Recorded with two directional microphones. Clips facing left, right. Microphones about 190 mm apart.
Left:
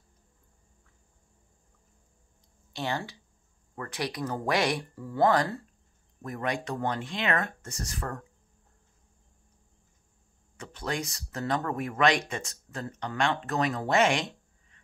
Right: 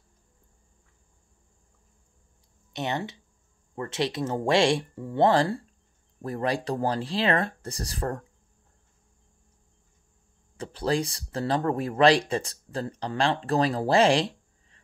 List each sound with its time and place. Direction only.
2.7 s speech: 20° right (ahead or behind)
10.6 s speech: 30° right (ahead or behind)